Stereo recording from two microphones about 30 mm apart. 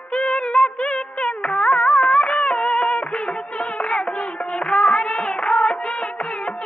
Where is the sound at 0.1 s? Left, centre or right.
Left.